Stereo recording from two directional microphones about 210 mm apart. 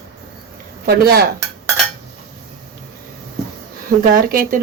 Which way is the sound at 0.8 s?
50° right (ahead or behind).